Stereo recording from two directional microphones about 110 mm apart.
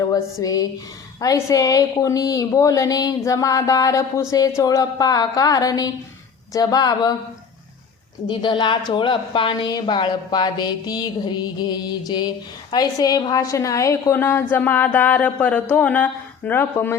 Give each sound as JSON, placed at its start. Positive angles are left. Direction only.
{"t": 0.1, "sound": "a woman's voice", "side_deg": 35}
{"t": 8.3, "sound": "a woman's voice", "side_deg": 45}
{"t": 14.1, "sound": "speech", "side_deg": 20}